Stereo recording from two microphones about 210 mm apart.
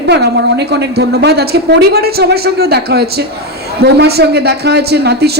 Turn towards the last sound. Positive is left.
turn(degrees=-50)  # may be behind; listen again after turning